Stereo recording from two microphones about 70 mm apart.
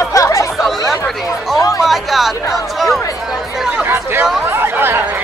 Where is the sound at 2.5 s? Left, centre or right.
Centre.